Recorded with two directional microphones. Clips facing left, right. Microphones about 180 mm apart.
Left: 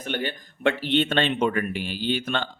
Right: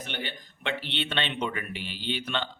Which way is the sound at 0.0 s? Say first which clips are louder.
Left 8 dB; 45° left (ahead or behind).